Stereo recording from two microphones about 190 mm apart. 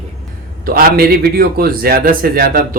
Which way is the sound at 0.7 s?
55° right (ahead or behind).